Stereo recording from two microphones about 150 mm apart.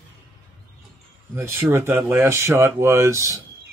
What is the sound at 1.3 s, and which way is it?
Speech, 15° right (ahead or behind).